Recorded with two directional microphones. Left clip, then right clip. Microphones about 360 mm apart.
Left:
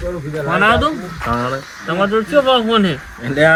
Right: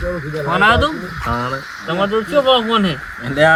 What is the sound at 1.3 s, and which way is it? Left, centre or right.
Speech, centre.